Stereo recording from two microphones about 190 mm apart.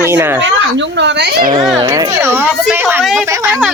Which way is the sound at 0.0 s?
10° right (ahead or behind).